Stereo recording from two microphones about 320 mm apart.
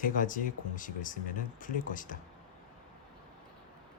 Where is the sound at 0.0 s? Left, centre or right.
Left.